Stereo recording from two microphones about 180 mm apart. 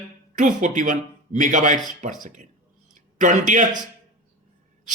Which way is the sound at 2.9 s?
45° right (ahead or behind).